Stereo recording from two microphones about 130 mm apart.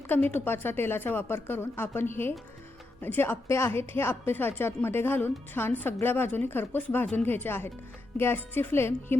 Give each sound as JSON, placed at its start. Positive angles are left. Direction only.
{"t": 0.3, "sound": "a woman's voice", "side_deg": 15}